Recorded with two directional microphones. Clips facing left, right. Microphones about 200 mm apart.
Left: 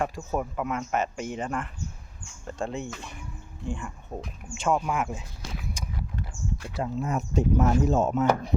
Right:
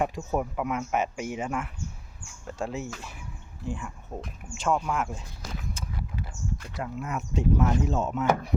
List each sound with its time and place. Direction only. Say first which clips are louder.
0.0 s speech: right 1 dB; 15° right (ahead or behind); by 5.2 s 5° left (ahead or behind)
5.8 s a sound: left 1 dB; 15° left (ahead or behind)
6.7 s speech: left 5 dB; 30° left (ahead or behind)